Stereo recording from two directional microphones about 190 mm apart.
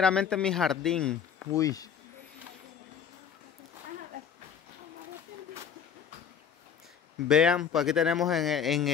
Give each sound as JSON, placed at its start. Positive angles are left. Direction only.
{"t": 0.0, "sound": "speech", "side_deg": 5}
{"t": 1.6, "sound": "speech", "side_deg": 20}
{"t": 7.2, "sound": "speech", "side_deg": -5}